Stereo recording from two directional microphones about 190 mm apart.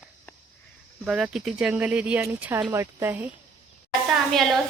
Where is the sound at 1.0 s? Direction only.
Centre (ahead or behind).